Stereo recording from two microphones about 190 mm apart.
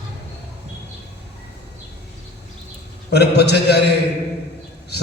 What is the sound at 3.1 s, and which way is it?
Speech, 60° left (ahead or behind).